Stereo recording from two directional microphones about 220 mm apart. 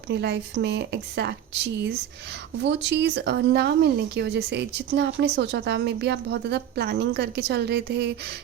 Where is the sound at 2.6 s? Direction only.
55° right (ahead or behind).